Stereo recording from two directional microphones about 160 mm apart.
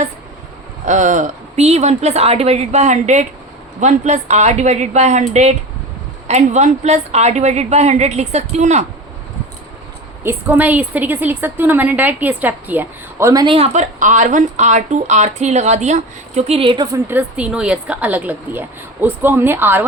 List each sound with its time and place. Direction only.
0.9 s speech: 50° right (ahead or behind)
10.2 s a woman's voice: 10° right (ahead or behind); by 13.7 s 30° right (ahead or behind)
13.7 s speech: 50° right (ahead or behind)
16.8 s a woman's voice: 15° right (ahead or behind)